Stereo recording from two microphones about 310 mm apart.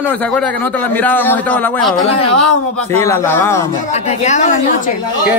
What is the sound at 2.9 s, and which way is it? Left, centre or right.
Speech, centre.